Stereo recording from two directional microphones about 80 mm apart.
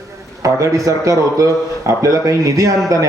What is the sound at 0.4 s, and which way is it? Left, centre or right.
A man's voice, right.